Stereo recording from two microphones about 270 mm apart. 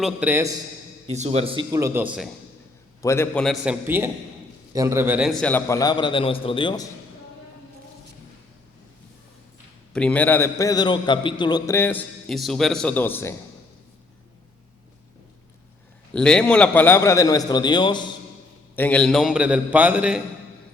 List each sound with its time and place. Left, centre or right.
0.0 s a man's voice: centre
1.0 s a man's voice: right; by 2.3 s centre
3.0 s a man's voice: centre
9.9 s a man's voice: centre
16.1 s a man's voice: centre
18.8 s a man's voice: centre